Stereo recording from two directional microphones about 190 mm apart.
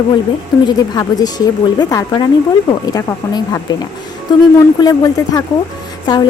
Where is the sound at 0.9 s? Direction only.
20° left (ahead or behind).